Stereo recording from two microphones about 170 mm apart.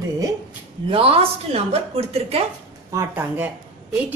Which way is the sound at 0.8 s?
35° right (ahead or behind).